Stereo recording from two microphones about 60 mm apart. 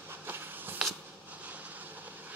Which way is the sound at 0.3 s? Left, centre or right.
Right.